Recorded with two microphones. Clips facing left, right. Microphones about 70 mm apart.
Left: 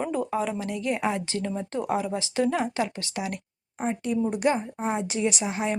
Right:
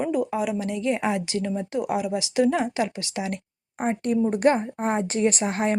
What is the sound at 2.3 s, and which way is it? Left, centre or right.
Speech, centre.